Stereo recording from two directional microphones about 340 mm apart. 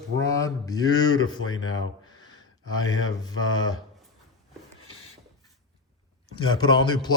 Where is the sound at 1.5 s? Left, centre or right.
Left.